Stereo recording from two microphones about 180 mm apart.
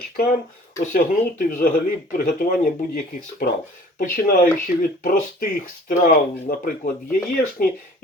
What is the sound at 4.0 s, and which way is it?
Speech, 45° left (ahead or behind).